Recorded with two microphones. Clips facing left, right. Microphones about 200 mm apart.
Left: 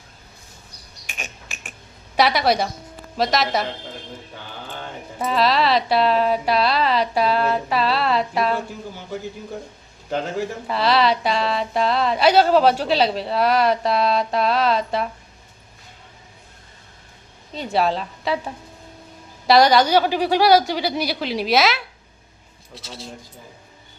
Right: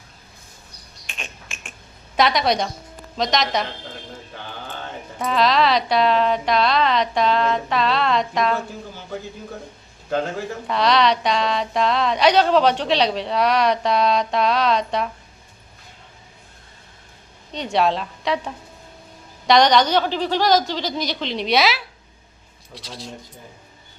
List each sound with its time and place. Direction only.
1.0 s a sound: 5° left (ahead or behind)
2.1 s speech: 5° left (ahead or behind)
5.2 s speech: 5° left (ahead or behind)
10.7 s speech: 5° left (ahead or behind)
17.5 s a woman's voice: 5° left (ahead or behind)